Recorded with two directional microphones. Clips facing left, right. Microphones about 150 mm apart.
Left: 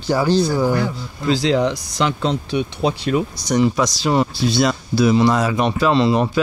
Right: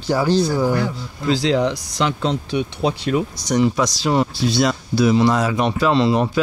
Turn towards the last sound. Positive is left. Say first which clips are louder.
# left 1 dB
turn(degrees=20)  # may be behind; listen again after turning